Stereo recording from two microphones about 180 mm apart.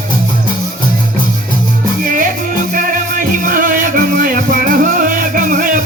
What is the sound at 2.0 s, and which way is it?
Music, 50° right (ahead or behind).